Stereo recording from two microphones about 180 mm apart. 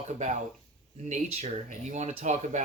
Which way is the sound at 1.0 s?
40° right (ahead or behind).